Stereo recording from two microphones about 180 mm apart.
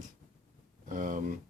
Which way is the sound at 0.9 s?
45° right (ahead or behind).